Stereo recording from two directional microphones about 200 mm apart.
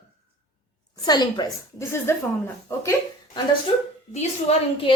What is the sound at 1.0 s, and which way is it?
A woman's voice, 20° left (ahead or behind).